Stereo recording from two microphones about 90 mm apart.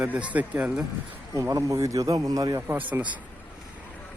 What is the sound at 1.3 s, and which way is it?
A man's voice, 35° right (ahead or behind).